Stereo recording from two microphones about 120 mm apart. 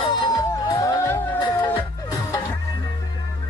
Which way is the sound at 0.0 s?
40° left (ahead or behind).